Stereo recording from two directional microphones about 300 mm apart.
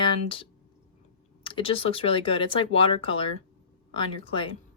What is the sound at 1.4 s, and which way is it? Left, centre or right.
Speech, centre.